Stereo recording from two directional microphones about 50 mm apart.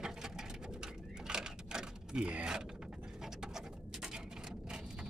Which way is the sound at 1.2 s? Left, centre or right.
Centre.